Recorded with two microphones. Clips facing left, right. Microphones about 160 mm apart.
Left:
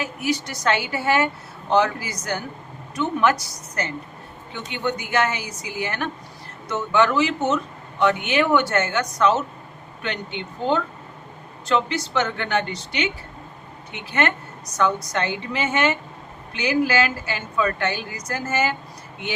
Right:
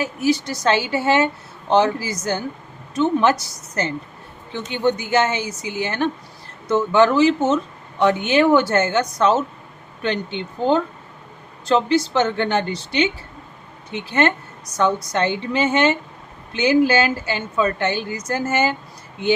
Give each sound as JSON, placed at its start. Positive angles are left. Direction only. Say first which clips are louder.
{"t": 0.0, "sound": "a woman's voice", "louder": "right 5 dB", "side_deg": -30}